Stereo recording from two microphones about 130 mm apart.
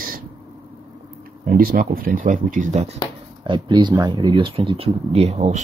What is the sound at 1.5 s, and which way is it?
Speech, 90° right.